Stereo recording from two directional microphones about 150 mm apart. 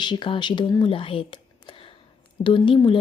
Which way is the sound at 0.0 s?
30° left (ahead or behind).